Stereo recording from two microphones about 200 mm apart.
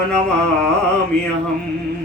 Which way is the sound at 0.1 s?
5° left (ahead or behind).